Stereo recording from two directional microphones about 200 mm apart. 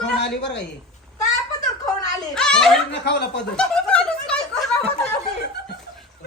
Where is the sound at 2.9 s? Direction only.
55° left (ahead or behind).